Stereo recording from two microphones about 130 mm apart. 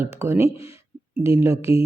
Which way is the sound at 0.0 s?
20° right (ahead or behind).